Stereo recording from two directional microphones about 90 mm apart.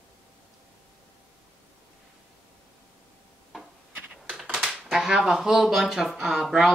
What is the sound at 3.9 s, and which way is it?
Computer keyboard, 15° right (ahead or behind).